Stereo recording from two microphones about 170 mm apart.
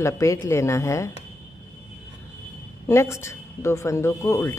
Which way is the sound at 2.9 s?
15° left (ahead or behind).